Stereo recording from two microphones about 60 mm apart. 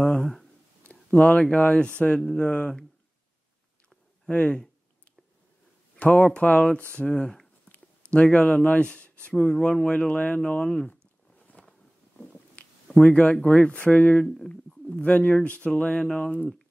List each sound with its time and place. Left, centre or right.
0.2 s a sound: centre
0.8 s a sound: left
1.4 s speech: left
4.3 s speech: centre
5.9 s speech: left
10.9 s a sound: left
13.0 s speech: left
14.2 s speech: centre
14.5 s speech: left